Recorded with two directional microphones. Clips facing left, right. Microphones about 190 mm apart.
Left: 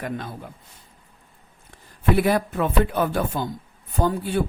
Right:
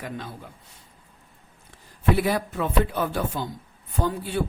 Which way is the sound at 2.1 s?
55° left (ahead or behind).